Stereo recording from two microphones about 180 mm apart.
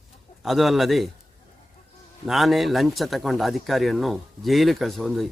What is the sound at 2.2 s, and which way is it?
Speech, centre (ahead or behind).